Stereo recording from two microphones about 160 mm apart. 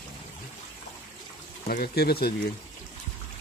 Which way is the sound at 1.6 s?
70° left (ahead or behind).